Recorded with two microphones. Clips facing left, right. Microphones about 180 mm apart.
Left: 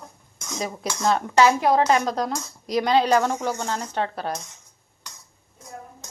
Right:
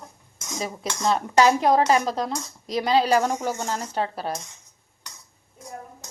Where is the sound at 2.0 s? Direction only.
Centre (ahead or behind).